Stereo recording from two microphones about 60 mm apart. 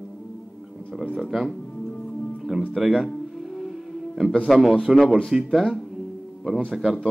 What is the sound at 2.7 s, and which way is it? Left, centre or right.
Speech, centre.